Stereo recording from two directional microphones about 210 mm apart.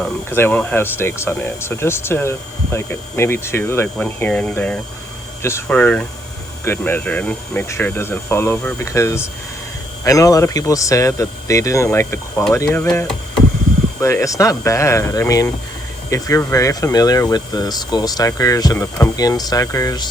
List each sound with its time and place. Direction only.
0.0 s speech: 10° left (ahead or behind)